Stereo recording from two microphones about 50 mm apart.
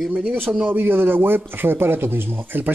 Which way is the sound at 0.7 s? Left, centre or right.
Right.